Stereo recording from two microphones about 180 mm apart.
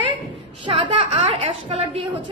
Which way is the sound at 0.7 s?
30° right (ahead or behind).